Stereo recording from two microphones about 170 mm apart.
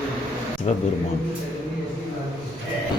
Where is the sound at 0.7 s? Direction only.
40° left (ahead or behind).